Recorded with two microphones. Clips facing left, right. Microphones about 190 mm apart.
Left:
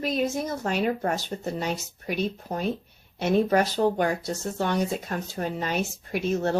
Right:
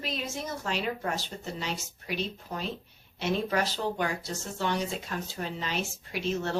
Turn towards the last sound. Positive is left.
turn(degrees=45)  # may be behind; listen again after turning